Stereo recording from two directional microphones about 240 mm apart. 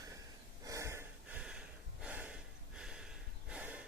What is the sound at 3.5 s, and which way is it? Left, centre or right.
Snort, centre.